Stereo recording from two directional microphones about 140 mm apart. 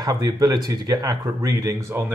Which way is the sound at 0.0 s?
30° right (ahead or behind).